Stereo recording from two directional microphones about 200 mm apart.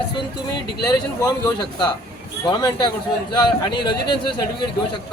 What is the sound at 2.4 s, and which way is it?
Speech, 20° left (ahead or behind).